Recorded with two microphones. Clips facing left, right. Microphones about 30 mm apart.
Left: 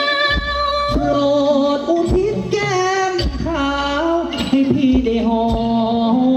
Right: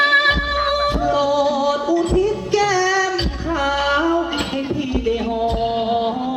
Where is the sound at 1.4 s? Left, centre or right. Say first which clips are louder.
Left 3 dB; left.